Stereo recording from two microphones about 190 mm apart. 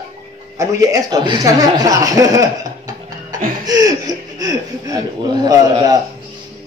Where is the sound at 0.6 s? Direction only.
20° right (ahead or behind).